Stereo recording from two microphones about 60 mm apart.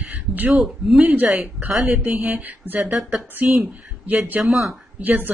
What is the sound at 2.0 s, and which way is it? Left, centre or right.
Speech, centre.